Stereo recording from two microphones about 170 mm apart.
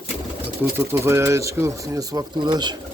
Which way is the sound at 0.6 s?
15° right (ahead or behind).